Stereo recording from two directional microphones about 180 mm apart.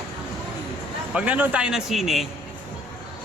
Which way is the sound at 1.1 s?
5° right (ahead or behind).